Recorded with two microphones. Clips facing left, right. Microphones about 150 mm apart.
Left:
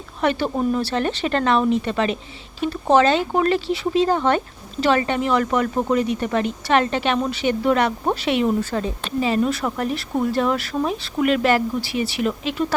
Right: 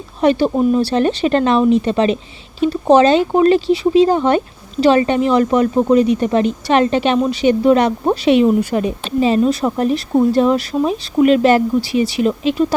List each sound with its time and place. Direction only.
0.2 s speech: 20° right (ahead or behind)